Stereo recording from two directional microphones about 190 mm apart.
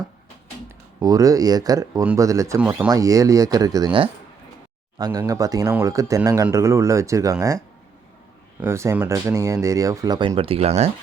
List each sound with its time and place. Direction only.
1.0 s speech: 20° right (ahead or behind)
8.6 s speech: 15° right (ahead or behind); by 10.9 s 35° right (ahead or behind)